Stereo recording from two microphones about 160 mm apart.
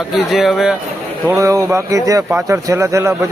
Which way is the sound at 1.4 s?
20° right (ahead or behind).